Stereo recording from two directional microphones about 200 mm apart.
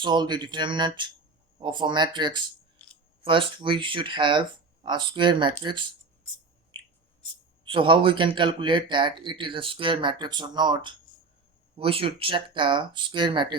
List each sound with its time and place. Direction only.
0.0 s speech: 20° right (ahead or behind)
7.6 s speech: 25° right (ahead or behind)